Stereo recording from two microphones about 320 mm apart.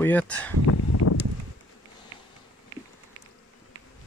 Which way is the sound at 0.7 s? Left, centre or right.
Left.